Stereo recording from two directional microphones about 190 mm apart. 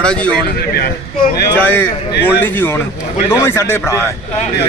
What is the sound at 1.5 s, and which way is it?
A man's voice, 10° left (ahead or behind).